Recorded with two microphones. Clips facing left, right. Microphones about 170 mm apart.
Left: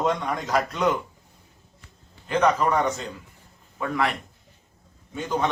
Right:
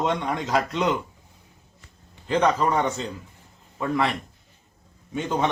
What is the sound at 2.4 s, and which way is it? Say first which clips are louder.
Speech: left 1 dB; 25° right (ahead or behind).